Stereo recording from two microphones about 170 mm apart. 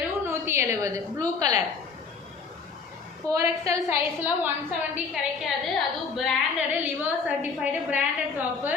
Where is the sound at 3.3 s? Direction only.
20° right (ahead or behind).